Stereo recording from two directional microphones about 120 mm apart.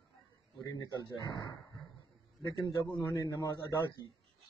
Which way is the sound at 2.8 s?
25° left (ahead or behind).